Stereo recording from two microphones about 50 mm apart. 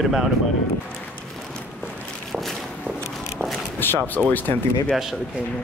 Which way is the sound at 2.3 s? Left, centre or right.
Centre.